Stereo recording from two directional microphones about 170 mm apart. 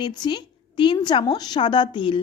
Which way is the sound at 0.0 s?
25° left (ahead or behind).